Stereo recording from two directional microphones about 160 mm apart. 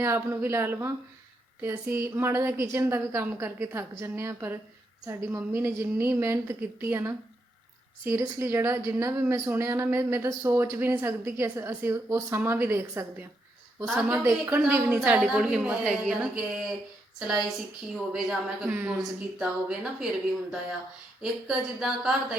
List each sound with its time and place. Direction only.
0.0 s a woman's voice: 15° right (ahead or behind)
13.8 s a woman's voice: centre (ahead or behind)
14.3 s a woman's voice: 15° right (ahead or behind)
18.7 s a woman's voice: 15° right (ahead or behind)
21.2 s a woman's voice: centre (ahead or behind)